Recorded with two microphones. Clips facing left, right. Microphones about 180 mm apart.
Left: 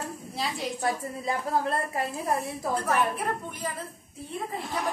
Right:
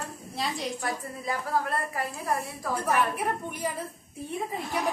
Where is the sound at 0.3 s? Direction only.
Centre (ahead or behind).